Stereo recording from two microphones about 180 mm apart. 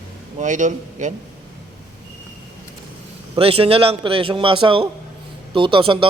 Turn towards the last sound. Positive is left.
turn(degrees=-30)  # may be behind; listen again after turning